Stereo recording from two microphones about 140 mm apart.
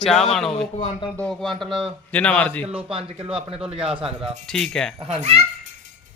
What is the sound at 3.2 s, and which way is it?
Speech, 45° right (ahead or behind).